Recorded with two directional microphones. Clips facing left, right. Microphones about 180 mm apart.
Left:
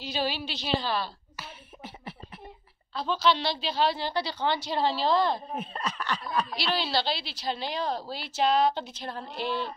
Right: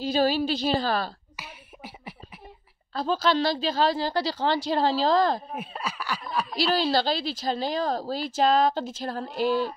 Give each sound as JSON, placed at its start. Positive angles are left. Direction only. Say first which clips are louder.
{"t": 0.1, "sound": "a woman's voice", "louder": "right 8 dB", "side_deg": -45}
{"t": 1.3, "sound": "beatboxing", "louder": "even", "side_deg": -15}
{"t": 2.9, "sound": "a woman's voice", "louder": "right 2 dB", "side_deg": -45}
{"t": 5.5, "sound": "speech", "louder": "even", "side_deg": -5}
{"t": 6.7, "sound": "a woman's voice", "louder": "right 6 dB", "side_deg": -45}